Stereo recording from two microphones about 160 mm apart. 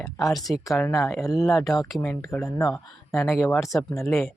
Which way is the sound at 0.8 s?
20° left (ahead or behind).